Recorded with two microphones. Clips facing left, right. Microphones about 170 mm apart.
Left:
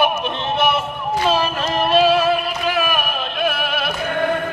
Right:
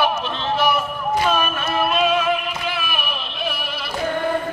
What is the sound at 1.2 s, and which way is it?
Music, 30° left (ahead or behind).